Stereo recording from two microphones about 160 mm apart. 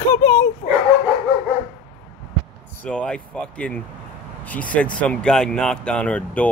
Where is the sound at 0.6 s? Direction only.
65° left (ahead or behind).